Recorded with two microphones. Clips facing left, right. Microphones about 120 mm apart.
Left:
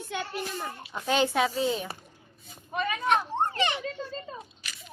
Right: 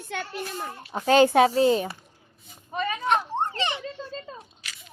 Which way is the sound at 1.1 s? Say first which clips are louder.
Right 8 dB; 50° right (ahead or behind).